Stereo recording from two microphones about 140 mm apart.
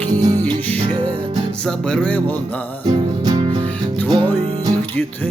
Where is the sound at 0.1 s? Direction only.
30° right (ahead or behind).